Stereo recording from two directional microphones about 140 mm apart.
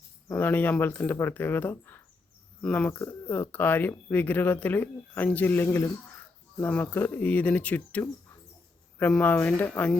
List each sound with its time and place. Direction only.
0.3 s speech: 10° left (ahead or behind)